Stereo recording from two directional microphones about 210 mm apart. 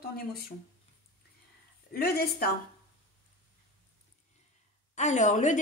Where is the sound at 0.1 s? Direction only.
45° left (ahead or behind).